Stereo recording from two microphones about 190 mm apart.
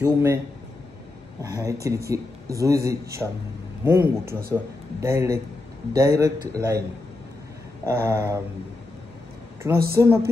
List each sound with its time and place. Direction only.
0.0 s speech: 15° right (ahead or behind)
1.4 s speech: 15° right (ahead or behind)
7.8 s speech: 15° right (ahead or behind)
9.9 s speech: 15° right (ahead or behind)